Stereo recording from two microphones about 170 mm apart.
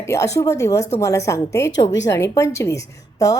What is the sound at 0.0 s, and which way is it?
A woman's voice, 15° left (ahead or behind).